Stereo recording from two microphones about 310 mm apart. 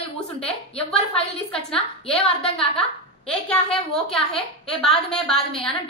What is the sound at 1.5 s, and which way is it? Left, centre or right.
A woman's voice, centre.